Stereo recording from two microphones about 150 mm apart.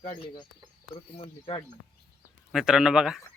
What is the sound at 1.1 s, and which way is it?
Speech, 35° left (ahead or behind).